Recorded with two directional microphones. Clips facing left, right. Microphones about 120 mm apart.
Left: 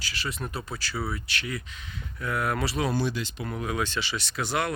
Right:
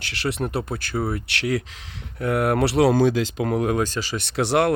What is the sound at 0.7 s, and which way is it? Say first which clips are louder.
Speech: right 7 dB; 55° right (ahead or behind).